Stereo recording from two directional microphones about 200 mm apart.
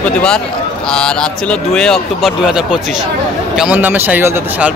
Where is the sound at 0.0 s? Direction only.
5° left (ahead or behind).